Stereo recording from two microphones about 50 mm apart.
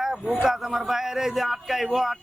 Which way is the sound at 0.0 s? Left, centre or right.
Centre.